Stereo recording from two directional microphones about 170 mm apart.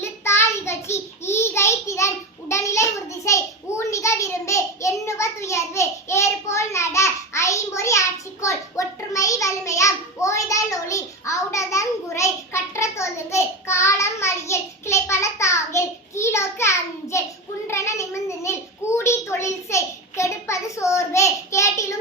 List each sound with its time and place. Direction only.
0.0 s child singing: 15° left (ahead or behind)